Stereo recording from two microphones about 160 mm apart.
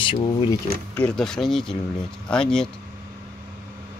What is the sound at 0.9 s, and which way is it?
Speech, 5° left (ahead or behind).